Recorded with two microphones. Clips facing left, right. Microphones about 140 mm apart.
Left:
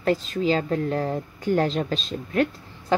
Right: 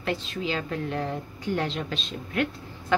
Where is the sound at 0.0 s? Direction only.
40° left (ahead or behind).